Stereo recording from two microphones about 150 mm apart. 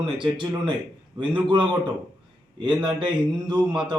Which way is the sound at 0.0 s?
35° right (ahead or behind).